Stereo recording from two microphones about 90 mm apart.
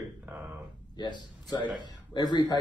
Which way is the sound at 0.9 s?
55° left (ahead or behind).